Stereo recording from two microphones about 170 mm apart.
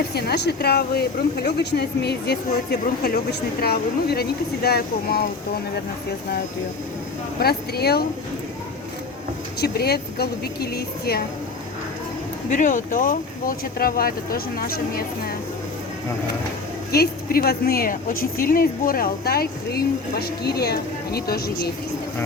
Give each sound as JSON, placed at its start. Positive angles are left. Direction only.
{"t": 0.1, "sound": "speech", "side_deg": 70}
{"t": 3.6, "sound": "a woman's voice", "side_deg": 65}
{"t": 7.3, "sound": "speech", "side_deg": 65}
{"t": 9.6, "sound": "speech", "side_deg": 70}
{"t": 12.5, "sound": "a woman's voice", "side_deg": 50}
{"t": 16.9, "sound": "a woman's voice", "side_deg": 65}